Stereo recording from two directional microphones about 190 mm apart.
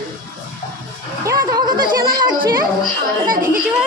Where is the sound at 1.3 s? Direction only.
20° right (ahead or behind).